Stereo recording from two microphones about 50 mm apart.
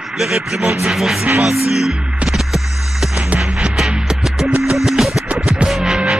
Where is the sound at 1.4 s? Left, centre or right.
Centre.